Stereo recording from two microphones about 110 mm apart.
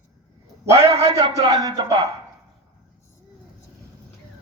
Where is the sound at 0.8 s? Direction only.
60° right (ahead or behind).